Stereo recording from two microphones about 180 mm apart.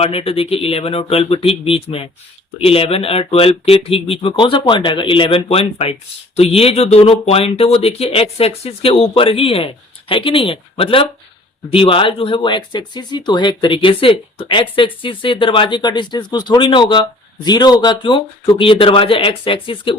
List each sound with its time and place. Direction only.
0.0 s speech: 35° left (ahead or behind)